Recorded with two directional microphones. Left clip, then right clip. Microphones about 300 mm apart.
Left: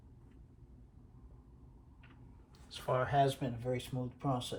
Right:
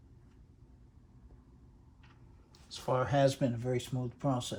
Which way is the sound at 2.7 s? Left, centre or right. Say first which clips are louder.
Right 2 dB; right.